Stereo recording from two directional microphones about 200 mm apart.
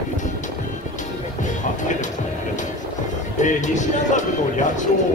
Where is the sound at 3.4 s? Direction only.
40° left (ahead or behind).